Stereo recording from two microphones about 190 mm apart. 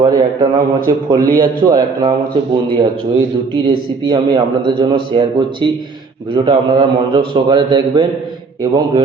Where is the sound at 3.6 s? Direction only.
25° right (ahead or behind).